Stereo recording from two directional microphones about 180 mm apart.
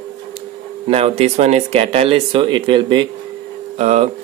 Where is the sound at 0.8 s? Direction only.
35° right (ahead or behind).